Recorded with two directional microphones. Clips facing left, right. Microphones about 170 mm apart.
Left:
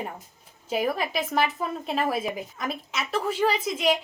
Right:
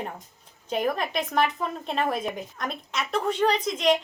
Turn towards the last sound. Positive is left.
turn(degrees=5)  # may be behind; listen again after turning